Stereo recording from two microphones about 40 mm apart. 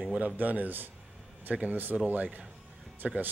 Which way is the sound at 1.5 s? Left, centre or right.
Right.